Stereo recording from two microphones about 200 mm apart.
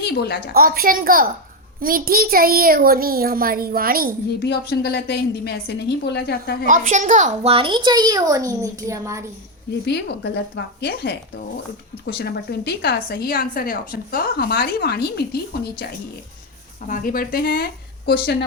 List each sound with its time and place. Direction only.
0.0 s a woman's voice: 55° left (ahead or behind)
0.5 s a child's voice: 45° right (ahead or behind)
4.4 s a woman's voice: 55° left (ahead or behind)
6.7 s a woman's voice: 40° right (ahead or behind); by 9.2 s 15° right (ahead or behind)
9.8 s a woman's voice: 55° left (ahead or behind)
16.8 s a woman's voice: 45° left (ahead or behind)